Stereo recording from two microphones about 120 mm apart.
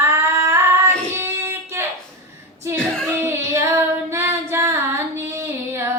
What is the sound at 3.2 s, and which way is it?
Female singing, 25° right (ahead or behind).